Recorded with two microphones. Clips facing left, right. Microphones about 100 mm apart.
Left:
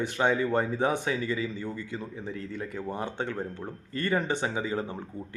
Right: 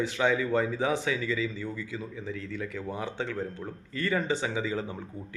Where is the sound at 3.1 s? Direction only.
50° left (ahead or behind).